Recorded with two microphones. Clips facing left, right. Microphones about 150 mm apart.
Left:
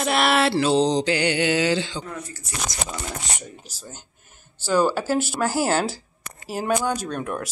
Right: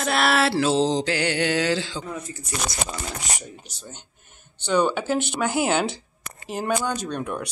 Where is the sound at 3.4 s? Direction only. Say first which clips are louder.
Even; 5° left (ahead or behind).